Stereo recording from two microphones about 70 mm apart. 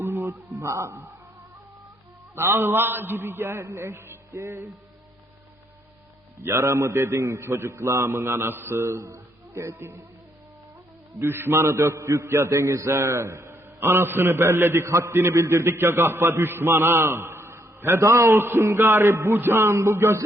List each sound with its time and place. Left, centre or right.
0.0 s music: right
2.3 s a man's voice: right
6.4 s a man's voice: right
11.2 s a man's voice: right